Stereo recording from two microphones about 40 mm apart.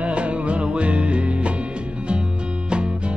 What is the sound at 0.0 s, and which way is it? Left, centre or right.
Music, right.